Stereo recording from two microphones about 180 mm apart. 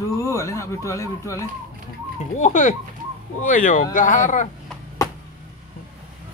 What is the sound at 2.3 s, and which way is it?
Speech, 40° left (ahead or behind).